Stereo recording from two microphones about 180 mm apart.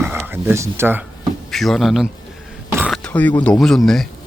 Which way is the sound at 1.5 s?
Centre (ahead or behind).